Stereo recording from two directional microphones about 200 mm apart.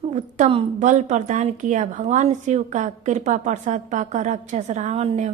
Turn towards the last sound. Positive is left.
turn(degrees=-35)  # may be behind; listen again after turning